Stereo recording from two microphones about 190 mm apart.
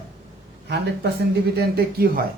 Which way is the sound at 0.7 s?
60° right (ahead or behind).